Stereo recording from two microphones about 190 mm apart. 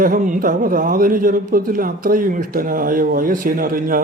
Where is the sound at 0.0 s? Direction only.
45° right (ahead or behind).